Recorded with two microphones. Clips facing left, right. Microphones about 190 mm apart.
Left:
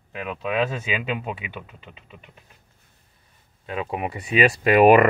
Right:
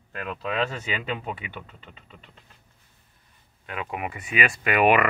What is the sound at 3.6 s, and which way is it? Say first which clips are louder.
Speech: left 4 dB; 25° left (ahead or behind).